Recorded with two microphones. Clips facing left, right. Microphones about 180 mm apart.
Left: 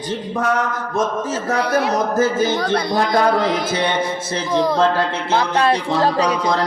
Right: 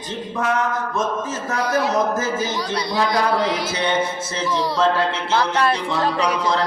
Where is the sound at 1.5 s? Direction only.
65° left (ahead or behind).